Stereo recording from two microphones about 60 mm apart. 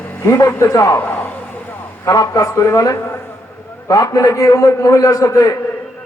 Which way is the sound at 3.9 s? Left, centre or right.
Left.